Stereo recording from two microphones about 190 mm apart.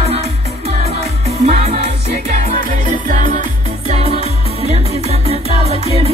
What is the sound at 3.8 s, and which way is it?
Music, 35° right (ahead or behind).